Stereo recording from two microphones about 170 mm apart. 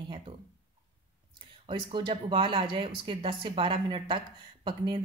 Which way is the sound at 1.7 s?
30° right (ahead or behind).